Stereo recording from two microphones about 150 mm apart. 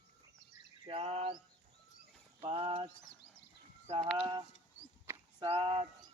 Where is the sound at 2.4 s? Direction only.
40° right (ahead or behind).